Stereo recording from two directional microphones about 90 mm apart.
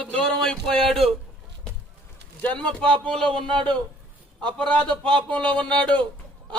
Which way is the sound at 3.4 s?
65° right (ahead or behind).